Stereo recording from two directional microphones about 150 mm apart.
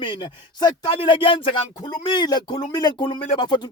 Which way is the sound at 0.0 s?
30° left (ahead or behind).